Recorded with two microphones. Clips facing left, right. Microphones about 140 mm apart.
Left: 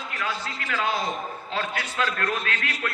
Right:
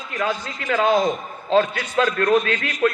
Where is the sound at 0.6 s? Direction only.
45° right (ahead or behind).